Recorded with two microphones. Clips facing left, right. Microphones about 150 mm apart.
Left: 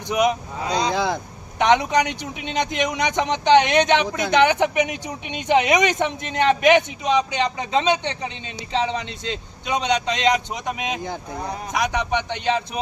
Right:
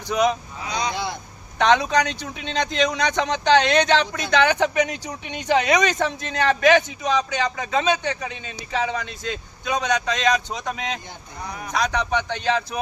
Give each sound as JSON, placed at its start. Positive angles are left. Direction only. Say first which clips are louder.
{"t": 0.1, "sound": "speech", "louder": "left 1 dB", "side_deg": 15}
{"t": 1.5, "sound": "speech", "louder": "left 1 dB", "side_deg": 15}